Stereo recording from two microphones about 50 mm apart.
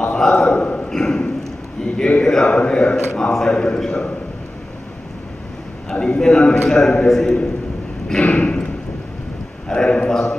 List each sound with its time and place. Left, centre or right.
0.0 s a man's voice: centre
0.6 s mantra: left
0.8 s a man's voice: centre
2.0 s mantra: left
3.1 s a man's voice: centre
5.9 s a man's voice: centre
8.1 s a sound: left
9.7 s a man's voice: centre